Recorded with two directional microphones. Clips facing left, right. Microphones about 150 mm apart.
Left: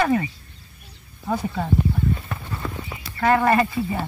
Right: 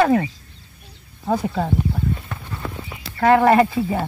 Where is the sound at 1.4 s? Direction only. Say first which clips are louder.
Right 4 dB; 70° right (ahead or behind).